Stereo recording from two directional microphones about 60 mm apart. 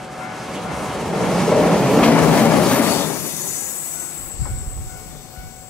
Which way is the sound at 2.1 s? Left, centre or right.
Centre.